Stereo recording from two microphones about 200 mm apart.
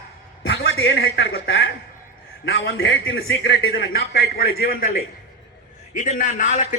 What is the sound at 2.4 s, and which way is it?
Speech, 65° left (ahead or behind).